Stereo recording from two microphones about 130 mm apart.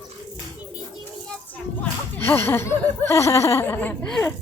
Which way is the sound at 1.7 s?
20° left (ahead or behind).